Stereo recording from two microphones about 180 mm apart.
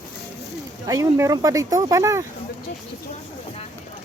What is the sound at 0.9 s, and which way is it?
Speech, 15° right (ahead or behind).